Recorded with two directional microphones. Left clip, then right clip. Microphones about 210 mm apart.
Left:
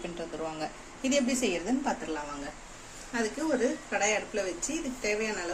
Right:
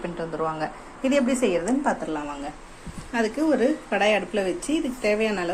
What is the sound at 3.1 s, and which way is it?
Speech, 20° right (ahead or behind).